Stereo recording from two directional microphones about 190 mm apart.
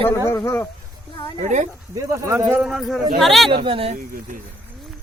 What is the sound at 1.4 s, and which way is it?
Speech, 40° right (ahead or behind).